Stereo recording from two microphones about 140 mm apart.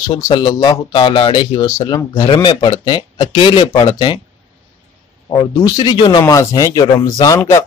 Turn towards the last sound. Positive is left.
turn(degrees=20)  # may be behind; listen again after turning